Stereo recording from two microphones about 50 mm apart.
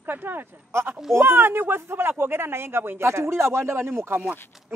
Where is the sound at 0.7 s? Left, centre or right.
Right.